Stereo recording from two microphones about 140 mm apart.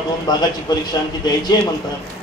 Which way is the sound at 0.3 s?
30° left (ahead or behind).